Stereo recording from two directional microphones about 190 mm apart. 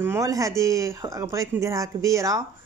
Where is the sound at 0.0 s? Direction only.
15° right (ahead or behind).